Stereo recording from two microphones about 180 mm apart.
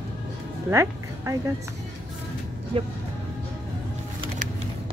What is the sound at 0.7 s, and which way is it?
Speech, 15° right (ahead or behind).